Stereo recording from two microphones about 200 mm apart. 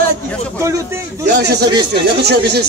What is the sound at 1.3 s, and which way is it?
A man's voice, 55° right (ahead or behind).